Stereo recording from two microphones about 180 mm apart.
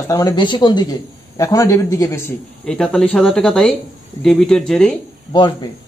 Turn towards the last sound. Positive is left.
turn(degrees=25)  # may be behind; listen again after turning